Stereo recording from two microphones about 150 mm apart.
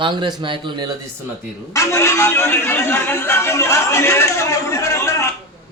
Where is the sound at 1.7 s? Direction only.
20° left (ahead or behind).